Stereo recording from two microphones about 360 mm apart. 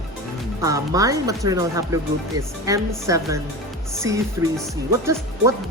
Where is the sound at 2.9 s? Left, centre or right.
Centre.